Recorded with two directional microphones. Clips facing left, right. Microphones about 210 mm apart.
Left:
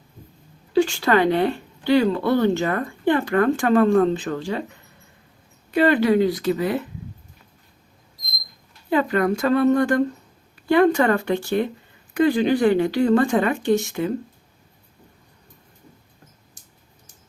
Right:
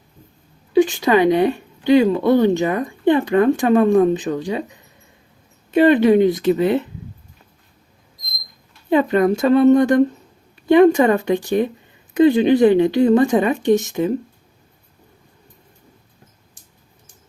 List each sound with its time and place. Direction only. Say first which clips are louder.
0.7 s speech: right 4 dB; 15° right (ahead or behind)
8.9 s speech: right 4 dB; 20° right (ahead or behind)